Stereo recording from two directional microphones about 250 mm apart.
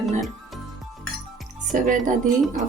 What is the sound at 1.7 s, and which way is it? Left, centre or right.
Speech, right.